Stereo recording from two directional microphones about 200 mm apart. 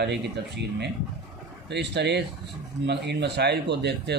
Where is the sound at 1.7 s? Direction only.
60° right (ahead or behind).